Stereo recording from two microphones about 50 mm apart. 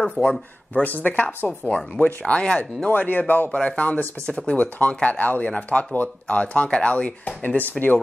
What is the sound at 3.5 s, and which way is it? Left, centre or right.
Speech, left.